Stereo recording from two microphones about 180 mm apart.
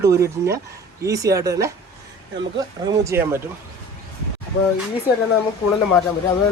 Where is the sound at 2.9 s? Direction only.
15° right (ahead or behind).